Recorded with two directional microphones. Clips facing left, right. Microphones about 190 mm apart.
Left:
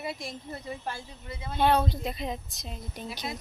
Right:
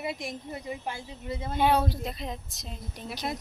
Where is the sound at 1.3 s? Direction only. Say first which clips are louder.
Right 5 dB; 40° right (ahead or behind).